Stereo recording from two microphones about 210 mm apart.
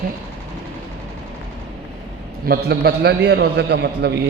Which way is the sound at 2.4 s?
50° right (ahead or behind).